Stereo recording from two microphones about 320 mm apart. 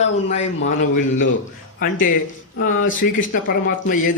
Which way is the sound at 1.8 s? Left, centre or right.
Left.